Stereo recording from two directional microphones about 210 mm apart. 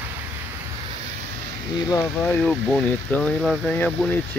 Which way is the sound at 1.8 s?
15° left (ahead or behind).